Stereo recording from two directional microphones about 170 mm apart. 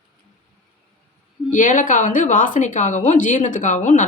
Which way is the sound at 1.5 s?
50° left (ahead or behind).